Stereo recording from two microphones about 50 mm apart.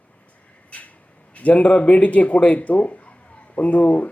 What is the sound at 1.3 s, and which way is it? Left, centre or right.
Speech, left.